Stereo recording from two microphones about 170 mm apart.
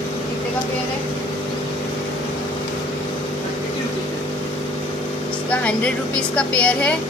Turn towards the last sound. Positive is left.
turn(degrees=5)  # may be behind; listen again after turning